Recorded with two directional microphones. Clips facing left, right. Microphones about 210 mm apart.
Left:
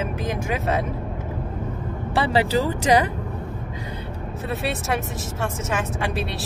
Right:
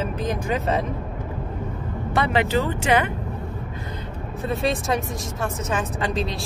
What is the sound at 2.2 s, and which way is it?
Speech, 35° left (ahead or behind).